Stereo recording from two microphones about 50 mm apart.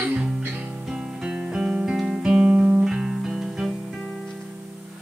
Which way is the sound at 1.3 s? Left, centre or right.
Centre.